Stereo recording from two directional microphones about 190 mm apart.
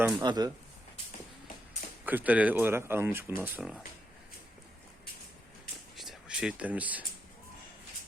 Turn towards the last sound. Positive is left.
turn(degrees=-10)  # may be behind; listen again after turning